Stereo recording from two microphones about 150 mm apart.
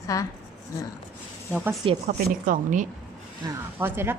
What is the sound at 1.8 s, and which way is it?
Speech, 45° right (ahead or behind).